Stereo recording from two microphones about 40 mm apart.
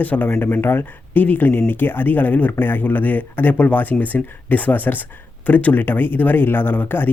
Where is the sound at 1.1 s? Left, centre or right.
Left.